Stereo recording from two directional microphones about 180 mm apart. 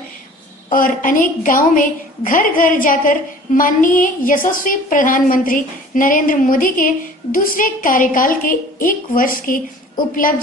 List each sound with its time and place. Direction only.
0.7 s a woman's voice: 50° left (ahead or behind)